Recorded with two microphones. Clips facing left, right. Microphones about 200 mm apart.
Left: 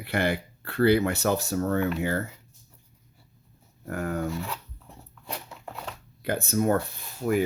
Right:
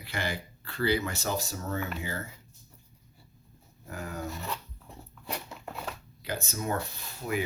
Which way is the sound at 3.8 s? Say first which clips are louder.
Left 8 dB; 60° left (ahead or behind).